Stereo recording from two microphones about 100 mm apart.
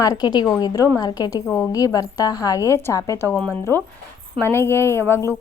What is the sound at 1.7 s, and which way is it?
A woman's voice, 35° left (ahead or behind).